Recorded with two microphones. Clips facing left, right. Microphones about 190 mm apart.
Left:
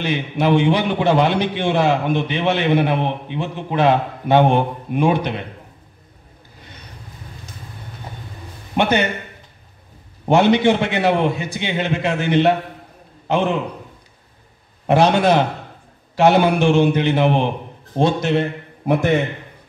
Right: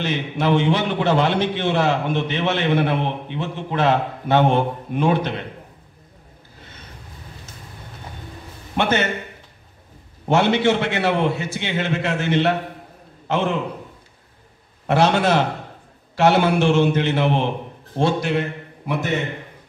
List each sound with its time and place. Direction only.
0.0 s a man's voice: 15° left (ahead or behind)
8.7 s a man's voice: 15° left (ahead or behind)
10.2 s a man's voice: 15° left (ahead or behind)
14.9 s a man's voice: 15° left (ahead or behind)